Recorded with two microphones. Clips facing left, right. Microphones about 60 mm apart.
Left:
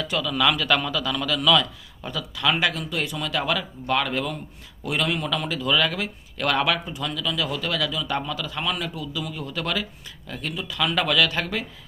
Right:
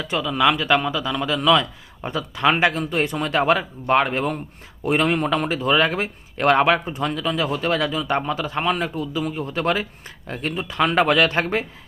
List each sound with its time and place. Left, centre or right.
0.0 s speech: right